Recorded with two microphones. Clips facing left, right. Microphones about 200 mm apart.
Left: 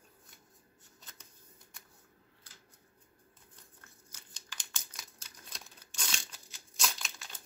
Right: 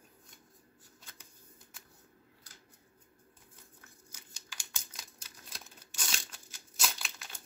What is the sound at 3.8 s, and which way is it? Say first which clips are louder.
Tearing: right 2 dB; 10° right (ahead or behind).